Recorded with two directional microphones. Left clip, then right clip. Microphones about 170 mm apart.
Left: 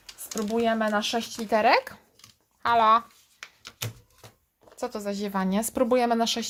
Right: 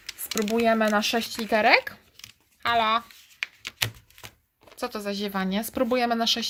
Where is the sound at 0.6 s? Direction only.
25° right (ahead or behind).